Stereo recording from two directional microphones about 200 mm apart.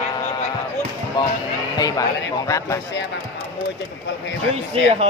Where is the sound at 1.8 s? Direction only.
20° left (ahead or behind).